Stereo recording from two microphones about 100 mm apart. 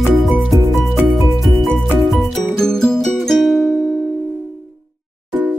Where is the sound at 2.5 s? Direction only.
5° left (ahead or behind).